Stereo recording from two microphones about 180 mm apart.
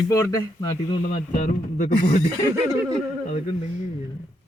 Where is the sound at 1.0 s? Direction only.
45° left (ahead or behind).